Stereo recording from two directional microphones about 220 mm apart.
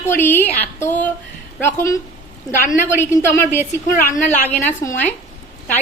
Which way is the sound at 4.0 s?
35° left (ahead or behind).